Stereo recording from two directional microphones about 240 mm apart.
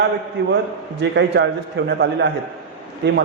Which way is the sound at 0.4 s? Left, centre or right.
Right.